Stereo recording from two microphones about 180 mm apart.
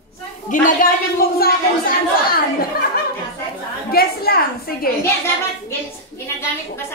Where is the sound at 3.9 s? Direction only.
60° left (ahead or behind).